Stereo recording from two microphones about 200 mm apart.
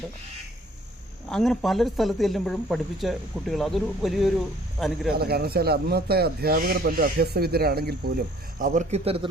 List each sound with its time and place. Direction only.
1.3 s speech: centre (ahead or behind)
5.1 s speech: 50° right (ahead or behind)
8.5 s speech: 40° right (ahead or behind)